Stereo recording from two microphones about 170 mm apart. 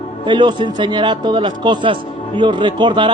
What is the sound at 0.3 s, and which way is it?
A man's voice, 25° right (ahead or behind).